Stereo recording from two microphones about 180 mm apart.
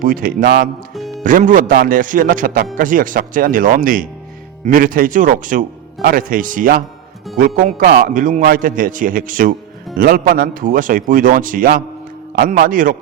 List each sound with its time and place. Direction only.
0.0 s speech: 50° right (ahead or behind)
0.4 s speech: 65° right (ahead or behind)
1.2 s speech: 45° right (ahead or behind)